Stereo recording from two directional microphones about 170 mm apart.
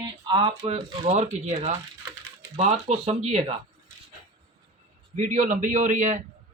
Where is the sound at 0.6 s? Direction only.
35° right (ahead or behind).